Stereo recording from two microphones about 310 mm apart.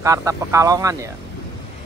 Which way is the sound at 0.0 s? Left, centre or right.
Centre.